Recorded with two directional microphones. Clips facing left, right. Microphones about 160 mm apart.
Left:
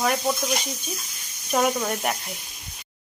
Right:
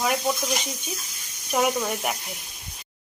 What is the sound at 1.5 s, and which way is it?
Speech, 5° right (ahead or behind).